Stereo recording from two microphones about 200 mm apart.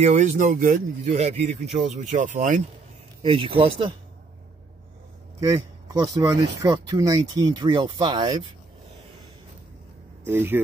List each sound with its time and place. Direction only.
0.0 s speech: 35° right (ahead or behind)
3.2 s speech: 25° right (ahead or behind)
5.4 s speech: 20° right (ahead or behind)
10.2 s speech: 10° right (ahead or behind)